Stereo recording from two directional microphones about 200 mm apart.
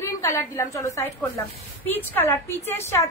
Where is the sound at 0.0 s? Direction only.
10° left (ahead or behind).